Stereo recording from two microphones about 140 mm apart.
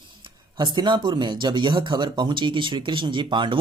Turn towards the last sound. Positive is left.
turn(degrees=-35)  # may be behind; listen again after turning